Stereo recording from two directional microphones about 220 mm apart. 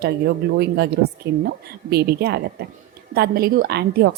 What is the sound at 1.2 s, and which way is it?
A woman's voice, 50° right (ahead or behind).